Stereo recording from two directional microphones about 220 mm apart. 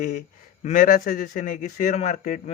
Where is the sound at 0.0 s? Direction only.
40° left (ahead or behind).